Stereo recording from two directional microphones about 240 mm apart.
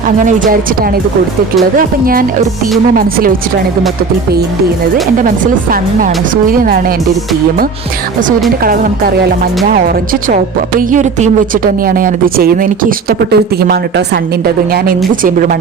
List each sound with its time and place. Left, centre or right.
0.3 s speech: right
2.9 s speech: right
5.7 s speech: right
8.6 s speech: right